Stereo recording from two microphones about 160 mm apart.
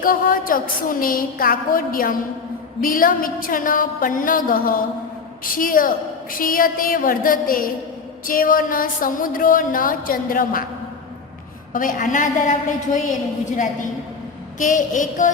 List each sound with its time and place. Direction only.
0.0 s music: 60° left (ahead or behind)
11.7 s music: 60° left (ahead or behind)
14.6 s a woman's voice: 55° left (ahead or behind)